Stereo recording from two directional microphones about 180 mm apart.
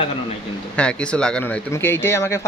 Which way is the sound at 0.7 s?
5° left (ahead or behind).